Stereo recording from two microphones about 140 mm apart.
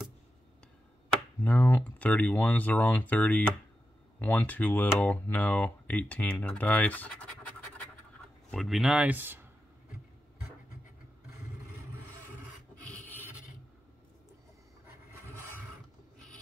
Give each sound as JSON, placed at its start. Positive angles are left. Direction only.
{"t": 1.4, "sound": "speech", "side_deg": 10}
{"t": 8.5, "sound": "speech", "side_deg": 0}